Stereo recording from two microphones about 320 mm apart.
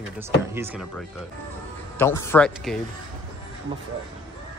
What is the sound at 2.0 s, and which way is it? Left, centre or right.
Speech, centre.